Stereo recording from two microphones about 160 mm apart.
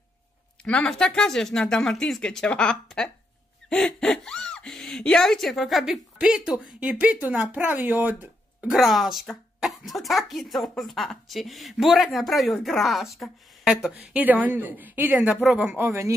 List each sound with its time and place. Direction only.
0.7 s speech: 5° left (ahead or behind); by 16.1 s 15° right (ahead or behind)